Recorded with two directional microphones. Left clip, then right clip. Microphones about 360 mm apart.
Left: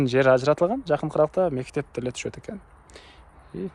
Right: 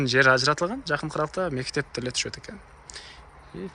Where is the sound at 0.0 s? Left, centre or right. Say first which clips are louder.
Even; centre.